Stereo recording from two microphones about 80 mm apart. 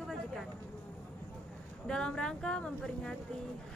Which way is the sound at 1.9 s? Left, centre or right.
Centre.